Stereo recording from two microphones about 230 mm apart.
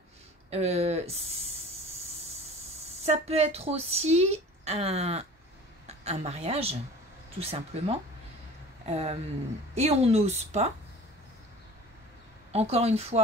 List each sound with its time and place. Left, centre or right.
0.5 s speech: right
3.0 s a woman's voice: right
12.5 s speech: right